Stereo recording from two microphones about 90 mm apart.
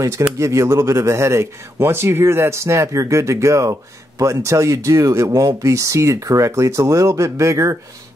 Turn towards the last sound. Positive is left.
turn(degrees=-35)  # may be behind; listen again after turning